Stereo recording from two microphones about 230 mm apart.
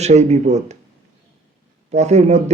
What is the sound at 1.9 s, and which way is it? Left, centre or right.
Speech, right.